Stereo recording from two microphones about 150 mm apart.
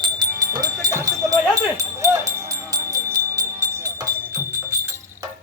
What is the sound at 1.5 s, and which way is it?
Music, 20° right (ahead or behind).